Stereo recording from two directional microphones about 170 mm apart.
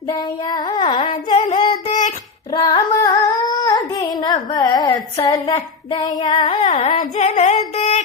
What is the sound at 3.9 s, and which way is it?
Child singing, 25° left (ahead or behind).